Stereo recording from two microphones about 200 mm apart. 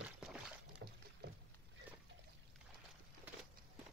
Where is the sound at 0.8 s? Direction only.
55° right (ahead or behind).